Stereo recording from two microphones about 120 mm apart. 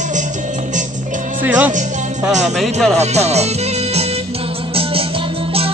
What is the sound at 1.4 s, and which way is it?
Speech, 15° right (ahead or behind).